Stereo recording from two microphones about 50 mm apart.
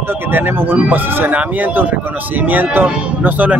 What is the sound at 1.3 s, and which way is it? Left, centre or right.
Speech, right.